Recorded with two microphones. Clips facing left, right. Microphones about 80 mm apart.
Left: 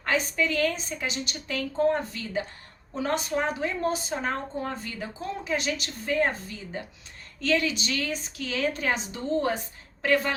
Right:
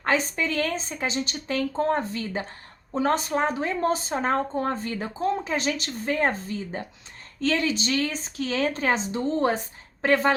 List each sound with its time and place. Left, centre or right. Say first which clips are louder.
0.0 s a woman's voice: right 2 dB; right